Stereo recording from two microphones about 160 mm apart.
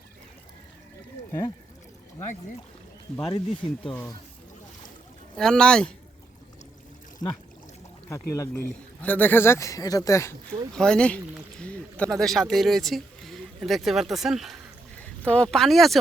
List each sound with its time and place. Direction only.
3.2 s speech: 30° left (ahead or behind)
5.4 s speech: 5° left (ahead or behind)
8.3 s speech: 20° left (ahead or behind)
10.7 s speech: 5° left (ahead or behind)